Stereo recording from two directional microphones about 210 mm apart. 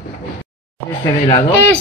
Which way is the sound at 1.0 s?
15° left (ahead or behind).